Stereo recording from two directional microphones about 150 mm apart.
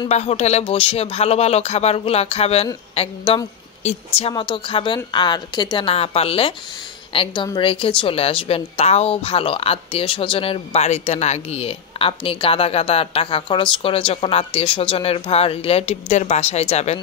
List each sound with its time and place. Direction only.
0.1 s a woman's voice: 45° left (ahead or behind)